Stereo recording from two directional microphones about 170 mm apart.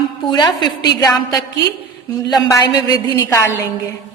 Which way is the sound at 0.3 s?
25° left (ahead or behind).